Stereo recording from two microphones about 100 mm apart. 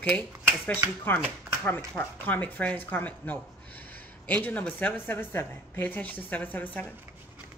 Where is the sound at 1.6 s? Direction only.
20° left (ahead or behind).